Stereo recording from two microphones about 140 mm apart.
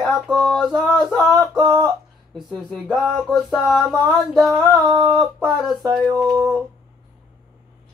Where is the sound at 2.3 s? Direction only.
Centre (ahead or behind).